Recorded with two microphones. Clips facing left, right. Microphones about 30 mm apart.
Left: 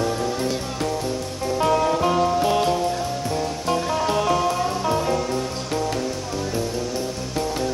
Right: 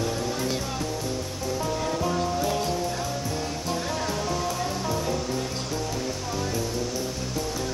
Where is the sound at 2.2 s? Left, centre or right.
Left.